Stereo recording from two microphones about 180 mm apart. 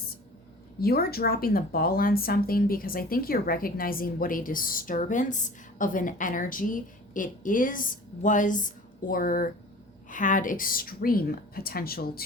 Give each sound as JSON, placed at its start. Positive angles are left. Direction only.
{"t": 0.8, "sound": "speech", "side_deg": 60}